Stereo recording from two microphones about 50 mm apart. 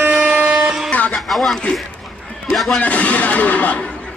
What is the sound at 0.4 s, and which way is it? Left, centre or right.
Music, right.